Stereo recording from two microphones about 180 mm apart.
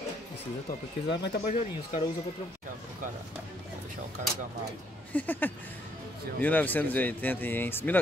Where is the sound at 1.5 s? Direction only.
40° left (ahead or behind).